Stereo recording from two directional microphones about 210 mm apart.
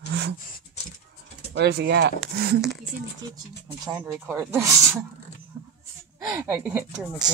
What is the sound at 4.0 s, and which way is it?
Speech, 15° right (ahead or behind).